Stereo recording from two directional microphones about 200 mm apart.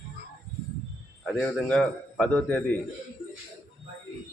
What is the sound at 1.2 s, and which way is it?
A man's voice, 5° left (ahead or behind).